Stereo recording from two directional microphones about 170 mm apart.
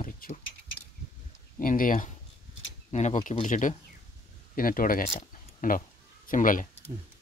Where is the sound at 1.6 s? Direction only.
55° left (ahead or behind).